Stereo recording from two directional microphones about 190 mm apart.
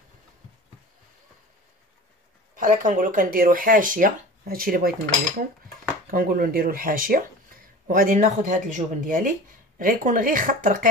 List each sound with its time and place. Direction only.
2.5 s speech: 45° right (ahead or behind)
6.0 s speech: 50° right (ahead or behind)